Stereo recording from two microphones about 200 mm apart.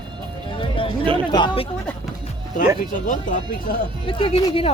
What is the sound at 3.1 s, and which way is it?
Speech, 40° left (ahead or behind).